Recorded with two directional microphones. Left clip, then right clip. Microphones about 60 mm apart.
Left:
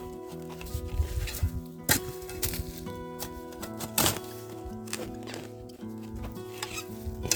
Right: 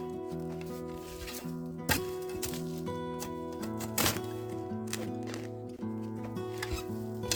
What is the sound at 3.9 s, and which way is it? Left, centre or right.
Music, left.